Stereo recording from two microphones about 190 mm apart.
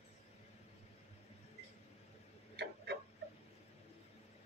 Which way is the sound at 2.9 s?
65° right (ahead or behind).